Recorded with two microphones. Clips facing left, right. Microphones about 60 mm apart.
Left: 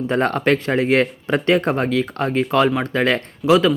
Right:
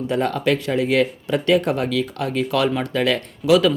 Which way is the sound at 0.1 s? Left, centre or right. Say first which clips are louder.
Left 2 dB; left.